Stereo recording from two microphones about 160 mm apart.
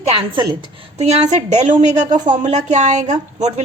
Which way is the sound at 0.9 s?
45° right (ahead or behind).